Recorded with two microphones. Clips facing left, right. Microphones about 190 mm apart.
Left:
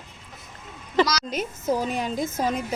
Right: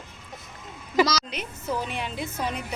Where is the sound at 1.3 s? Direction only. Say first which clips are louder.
Left 6 dB; 45° left (ahead or behind).